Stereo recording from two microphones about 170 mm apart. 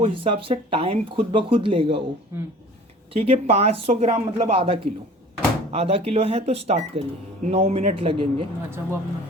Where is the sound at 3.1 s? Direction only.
35° right (ahead or behind).